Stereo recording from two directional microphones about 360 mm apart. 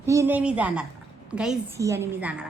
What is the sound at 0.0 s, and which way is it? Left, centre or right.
A woman's voice, centre.